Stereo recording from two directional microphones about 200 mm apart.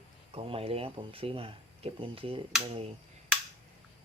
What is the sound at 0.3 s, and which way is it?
Speech, 30° right (ahead or behind).